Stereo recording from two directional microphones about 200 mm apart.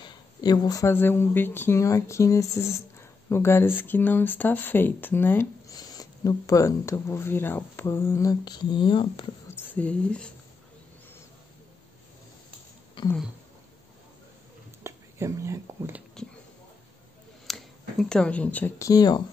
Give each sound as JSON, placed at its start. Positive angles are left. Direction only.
{"t": 0.0, "sound": "speech", "side_deg": 20}
{"t": 9.6, "sound": "speech", "side_deg": 10}
{"t": 13.0, "sound": "a sound", "side_deg": 25}
{"t": 14.8, "sound": "speech", "side_deg": -15}
{"t": 16.2, "sound": "speech", "side_deg": 5}
{"t": 17.5, "sound": "speech", "side_deg": 0}